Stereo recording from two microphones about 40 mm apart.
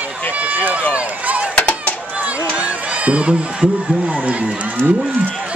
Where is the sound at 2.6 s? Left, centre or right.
Right.